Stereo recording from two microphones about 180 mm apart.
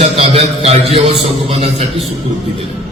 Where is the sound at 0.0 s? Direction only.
35° right (ahead or behind).